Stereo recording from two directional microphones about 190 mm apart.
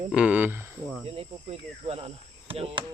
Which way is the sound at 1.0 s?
30° right (ahead or behind).